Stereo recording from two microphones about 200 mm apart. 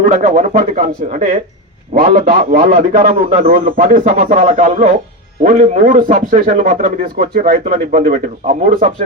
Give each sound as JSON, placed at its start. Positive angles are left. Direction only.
{"t": 0.0, "sound": "a man's voice", "side_deg": -40}